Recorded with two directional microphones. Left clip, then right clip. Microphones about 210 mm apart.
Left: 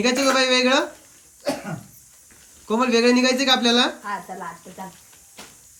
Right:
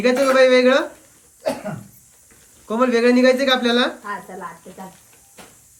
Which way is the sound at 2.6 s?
20° left (ahead or behind).